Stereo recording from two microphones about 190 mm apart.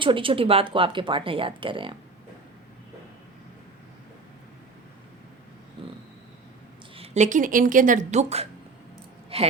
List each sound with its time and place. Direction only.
0.0 s speech: 25° right (ahead or behind)
6.9 s speech: 35° right (ahead or behind)